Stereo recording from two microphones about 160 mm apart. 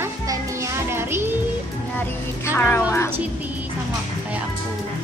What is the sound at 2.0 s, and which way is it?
Music, 15° left (ahead or behind).